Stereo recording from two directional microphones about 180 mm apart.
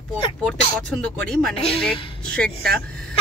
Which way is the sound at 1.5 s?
30° left (ahead or behind).